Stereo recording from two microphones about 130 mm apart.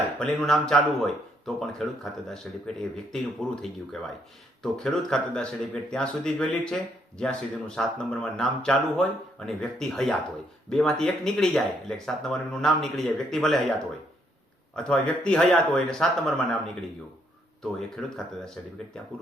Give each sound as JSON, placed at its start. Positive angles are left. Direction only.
{"t": 0.2, "sound": "speech", "side_deg": 5}
{"t": 14.8, "sound": "speech", "side_deg": 10}
{"t": 17.6, "sound": "speech", "side_deg": 0}